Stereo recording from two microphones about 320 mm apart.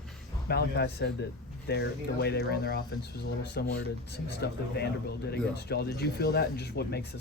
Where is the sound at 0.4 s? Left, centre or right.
Left.